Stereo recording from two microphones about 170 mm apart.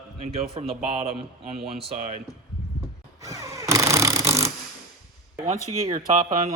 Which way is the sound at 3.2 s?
20° right (ahead or behind).